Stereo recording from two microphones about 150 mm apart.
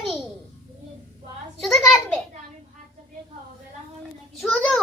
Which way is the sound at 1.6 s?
Centre (ahead or behind).